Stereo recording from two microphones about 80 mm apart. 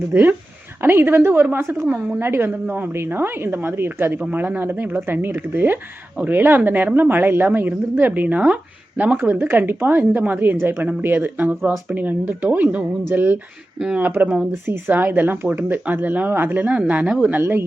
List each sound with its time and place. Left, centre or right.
0.1 s a woman's voice: right
13.7 s speech: centre
14.0 s a woman's voice: right